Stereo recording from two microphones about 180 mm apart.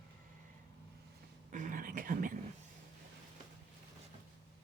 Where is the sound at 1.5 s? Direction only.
45° right (ahead or behind).